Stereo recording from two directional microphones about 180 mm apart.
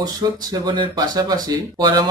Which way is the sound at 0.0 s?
20° right (ahead or behind).